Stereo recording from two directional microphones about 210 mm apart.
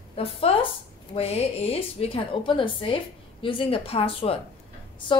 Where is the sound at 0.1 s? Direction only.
25° left (ahead or behind).